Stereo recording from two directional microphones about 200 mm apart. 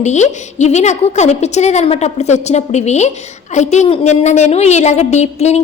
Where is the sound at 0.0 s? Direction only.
35° left (ahead or behind).